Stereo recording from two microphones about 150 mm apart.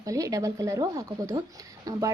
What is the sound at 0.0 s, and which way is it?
Speech, 20° right (ahead or behind).